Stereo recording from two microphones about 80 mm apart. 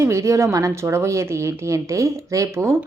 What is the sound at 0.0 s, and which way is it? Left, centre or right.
Speech, right.